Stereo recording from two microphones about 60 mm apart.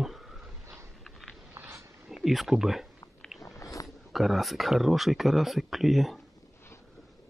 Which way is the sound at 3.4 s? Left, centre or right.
Left.